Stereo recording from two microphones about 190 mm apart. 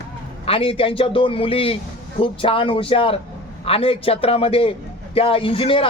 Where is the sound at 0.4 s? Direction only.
30° left (ahead or behind).